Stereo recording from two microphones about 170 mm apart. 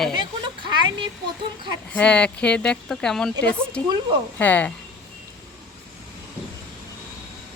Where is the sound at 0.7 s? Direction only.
25° right (ahead or behind).